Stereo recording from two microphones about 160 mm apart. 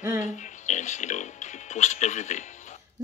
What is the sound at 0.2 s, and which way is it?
Speech, 50° left (ahead or behind).